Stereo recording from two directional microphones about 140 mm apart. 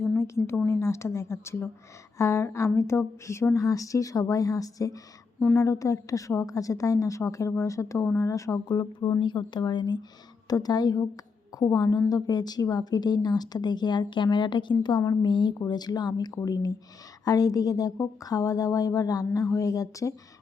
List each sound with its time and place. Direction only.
0.0 s speech: 15° left (ahead or behind)